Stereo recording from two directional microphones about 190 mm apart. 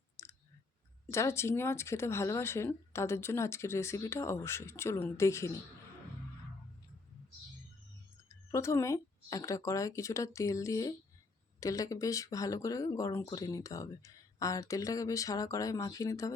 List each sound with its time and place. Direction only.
0.2 s clicking: 15° left (ahead or behind)
1.1 s speech: 15° left (ahead or behind)
8.3 s speech: 15° left (ahead or behind)